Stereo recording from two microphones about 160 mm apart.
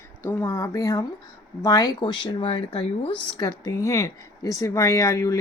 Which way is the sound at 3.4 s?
20° left (ahead or behind).